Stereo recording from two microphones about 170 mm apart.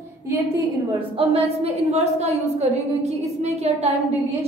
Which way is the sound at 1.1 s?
35° right (ahead or behind).